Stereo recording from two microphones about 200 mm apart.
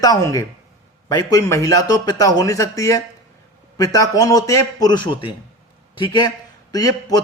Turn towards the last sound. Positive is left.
turn(degrees=20)  # may be behind; listen again after turning